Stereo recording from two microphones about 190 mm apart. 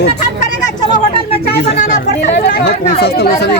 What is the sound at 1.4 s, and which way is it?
Speech, 60° left (ahead or behind).